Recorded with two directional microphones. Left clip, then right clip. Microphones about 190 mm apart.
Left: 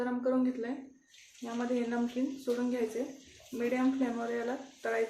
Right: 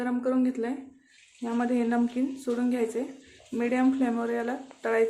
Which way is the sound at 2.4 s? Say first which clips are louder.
Right 4 dB; 30° right (ahead or behind).